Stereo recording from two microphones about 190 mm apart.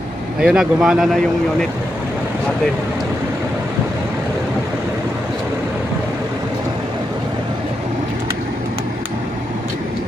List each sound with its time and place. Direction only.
0.4 s speech: 5° right (ahead or behind)